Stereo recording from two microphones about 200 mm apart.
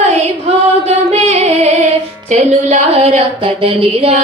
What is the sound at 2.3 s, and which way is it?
Child singing, 35° right (ahead or behind).